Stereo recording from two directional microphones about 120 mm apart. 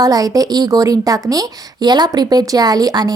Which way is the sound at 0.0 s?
30° right (ahead or behind).